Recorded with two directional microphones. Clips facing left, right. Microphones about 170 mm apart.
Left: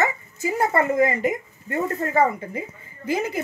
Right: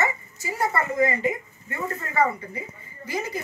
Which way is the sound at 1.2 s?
45° left (ahead or behind).